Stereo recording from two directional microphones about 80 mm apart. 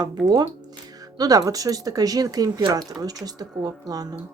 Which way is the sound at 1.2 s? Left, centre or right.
Right.